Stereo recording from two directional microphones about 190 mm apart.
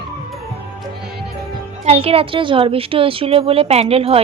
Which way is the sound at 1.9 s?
30° right (ahead or behind).